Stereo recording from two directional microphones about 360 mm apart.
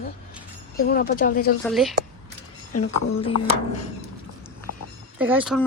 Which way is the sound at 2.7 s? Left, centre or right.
Left.